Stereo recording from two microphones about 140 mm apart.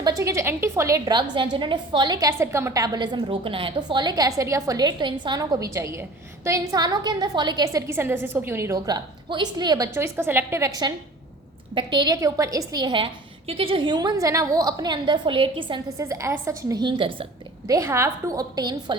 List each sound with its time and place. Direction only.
0.0 s a woman's voice: 25° right (ahead or behind)
16.0 s a woman's voice: 20° right (ahead or behind)
17.7 s a woman's voice: 20° right (ahead or behind)